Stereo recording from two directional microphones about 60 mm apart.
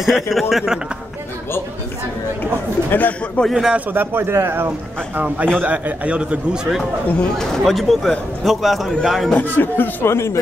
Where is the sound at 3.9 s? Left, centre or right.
Right.